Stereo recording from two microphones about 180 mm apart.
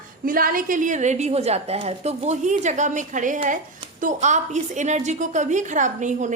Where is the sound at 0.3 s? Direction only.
50° right (ahead or behind).